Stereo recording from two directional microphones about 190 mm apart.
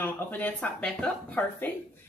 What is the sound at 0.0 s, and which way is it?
Speech, 10° left (ahead or behind).